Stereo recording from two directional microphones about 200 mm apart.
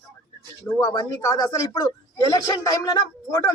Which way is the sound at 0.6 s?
20° left (ahead or behind).